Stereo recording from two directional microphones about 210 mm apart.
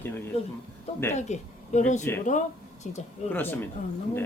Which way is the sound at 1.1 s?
35° left (ahead or behind).